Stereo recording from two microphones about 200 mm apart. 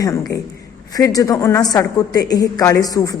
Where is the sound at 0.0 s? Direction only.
15° left (ahead or behind).